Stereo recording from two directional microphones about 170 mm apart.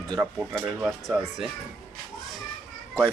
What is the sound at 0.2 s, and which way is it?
Speech, 5° right (ahead or behind).